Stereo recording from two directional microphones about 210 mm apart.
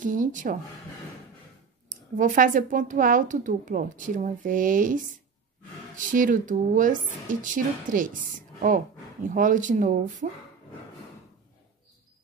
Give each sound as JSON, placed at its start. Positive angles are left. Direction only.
{"t": 0.0, "sound": "a woman's voice", "side_deg": -40}
{"t": 2.1, "sound": "a woman's voice", "side_deg": -40}
{"t": 6.1, "sound": "a woman's voice", "side_deg": -40}